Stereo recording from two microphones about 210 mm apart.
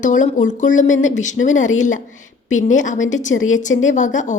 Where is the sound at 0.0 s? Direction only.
35° left (ahead or behind).